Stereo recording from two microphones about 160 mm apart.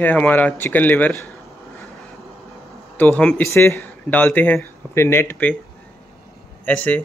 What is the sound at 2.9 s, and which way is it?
Speech, 10° left (ahead or behind).